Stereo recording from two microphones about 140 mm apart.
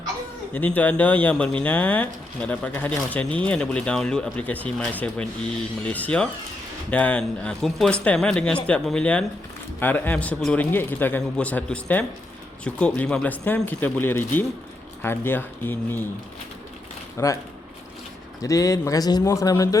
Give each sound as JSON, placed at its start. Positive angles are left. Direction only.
{"t": 0.5, "sound": "speech", "side_deg": 10}
{"t": 17.2, "sound": "speech", "side_deg": 20}
{"t": 18.4, "sound": "speech", "side_deg": 25}